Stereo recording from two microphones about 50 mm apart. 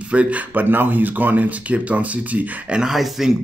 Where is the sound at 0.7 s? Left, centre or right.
Right.